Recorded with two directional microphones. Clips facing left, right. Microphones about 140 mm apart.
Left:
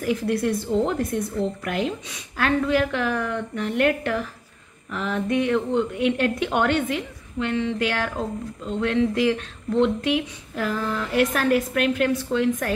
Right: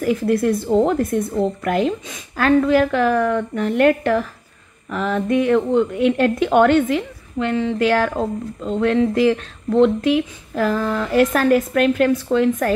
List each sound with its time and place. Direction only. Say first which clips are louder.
0.0 s speech: right 5 dB; 45° right (ahead or behind)